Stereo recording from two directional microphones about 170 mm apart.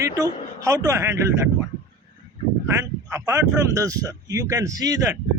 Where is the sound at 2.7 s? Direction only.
20° right (ahead or behind).